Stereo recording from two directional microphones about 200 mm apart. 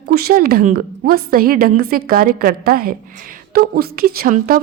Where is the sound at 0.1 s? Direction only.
50° right (ahead or behind).